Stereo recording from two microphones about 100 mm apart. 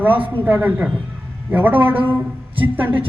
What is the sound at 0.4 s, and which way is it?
A man's voice, 20° right (ahead or behind).